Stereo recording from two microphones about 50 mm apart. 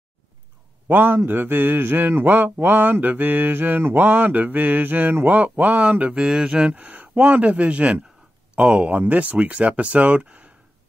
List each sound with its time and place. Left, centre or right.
0.8 s speech: right
2.6 s mantra: right
6.2 s speech: centre
6.8 s speech: right